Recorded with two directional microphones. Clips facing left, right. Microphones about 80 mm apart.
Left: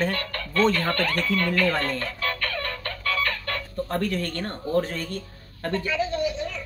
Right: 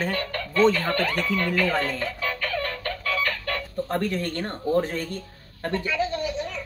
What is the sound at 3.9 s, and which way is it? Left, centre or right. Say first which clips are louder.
Speech: right 1 dB; right.